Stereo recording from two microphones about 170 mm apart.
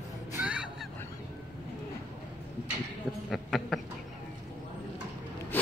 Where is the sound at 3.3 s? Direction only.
Centre (ahead or behind).